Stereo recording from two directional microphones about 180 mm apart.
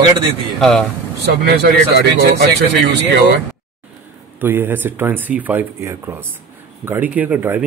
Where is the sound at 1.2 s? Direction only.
70° right (ahead or behind).